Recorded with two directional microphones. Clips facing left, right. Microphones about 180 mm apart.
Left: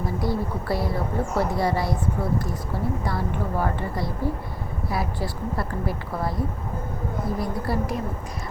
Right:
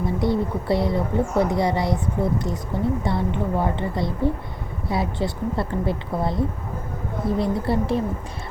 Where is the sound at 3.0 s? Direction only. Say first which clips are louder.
Right 4 dB; 25° right (ahead or behind).